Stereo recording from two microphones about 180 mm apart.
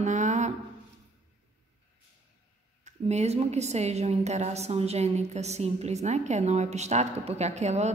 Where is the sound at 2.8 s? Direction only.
40° right (ahead or behind).